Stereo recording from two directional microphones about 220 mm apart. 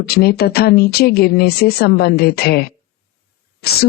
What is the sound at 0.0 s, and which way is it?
A woman's voice, 45° left (ahead or behind).